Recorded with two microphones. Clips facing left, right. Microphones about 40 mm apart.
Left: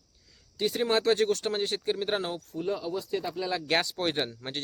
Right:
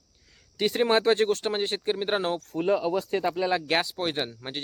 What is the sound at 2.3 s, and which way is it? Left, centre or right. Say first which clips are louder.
Speech: right 7 dB; right.